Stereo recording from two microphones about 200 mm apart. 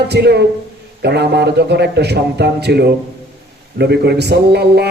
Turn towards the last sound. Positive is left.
turn(degrees=-55)  # may be behind; listen again after turning